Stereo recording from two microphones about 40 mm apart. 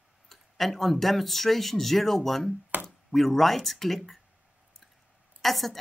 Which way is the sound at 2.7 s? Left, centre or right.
Right.